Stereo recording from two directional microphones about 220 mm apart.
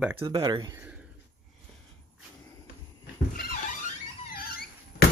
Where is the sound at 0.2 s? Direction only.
20° right (ahead or behind).